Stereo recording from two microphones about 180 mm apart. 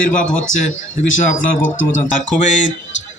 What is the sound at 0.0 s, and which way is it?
A man's voice, 45° left (ahead or behind).